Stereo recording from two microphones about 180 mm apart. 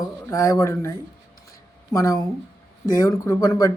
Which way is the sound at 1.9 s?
20° left (ahead or behind).